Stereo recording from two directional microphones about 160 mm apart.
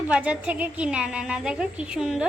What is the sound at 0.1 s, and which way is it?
A child's voice, 5° right (ahead or behind).